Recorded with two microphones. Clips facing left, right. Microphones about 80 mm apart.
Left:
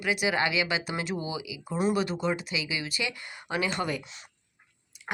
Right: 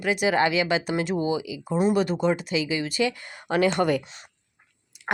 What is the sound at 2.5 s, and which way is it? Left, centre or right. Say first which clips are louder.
Speech: right 8 dB; right.